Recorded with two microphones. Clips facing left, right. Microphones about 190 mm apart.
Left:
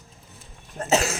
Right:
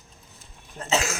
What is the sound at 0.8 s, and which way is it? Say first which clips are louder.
Speech: left 3 dB; 40° left (ahead or behind).